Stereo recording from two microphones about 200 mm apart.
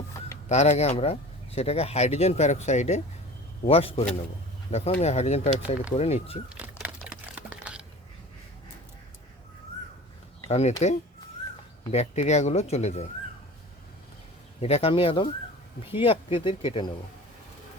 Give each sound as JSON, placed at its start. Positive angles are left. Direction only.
{"t": 0.4, "sound": "speech", "side_deg": 35}
{"t": 6.7, "sound": "typing", "side_deg": -5}
{"t": 10.5, "sound": "speech", "side_deg": 35}
{"t": 14.6, "sound": "speech", "side_deg": 30}